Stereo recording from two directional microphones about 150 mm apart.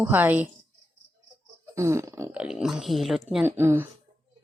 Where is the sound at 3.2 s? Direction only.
10° right (ahead or behind).